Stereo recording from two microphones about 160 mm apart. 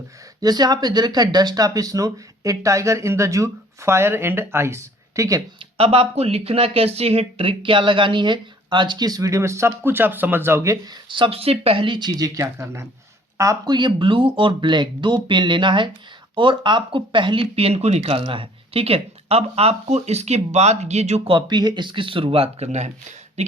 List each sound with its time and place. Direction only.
0.4 s speech: 25° right (ahead or behind)
5.7 s speech: 35° right (ahead or behind); by 10.8 s 15° right (ahead or behind)
11.1 s speech: 35° right (ahead or behind)
21.3 s speech: 25° right (ahead or behind); by 23.5 s 45° right (ahead or behind)